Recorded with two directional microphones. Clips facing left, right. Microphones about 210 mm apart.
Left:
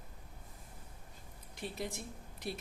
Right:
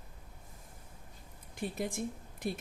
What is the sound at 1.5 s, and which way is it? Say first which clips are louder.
Speech: right 5 dB; 50° right (ahead or behind).